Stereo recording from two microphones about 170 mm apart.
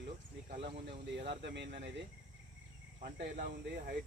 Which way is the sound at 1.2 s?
80° right.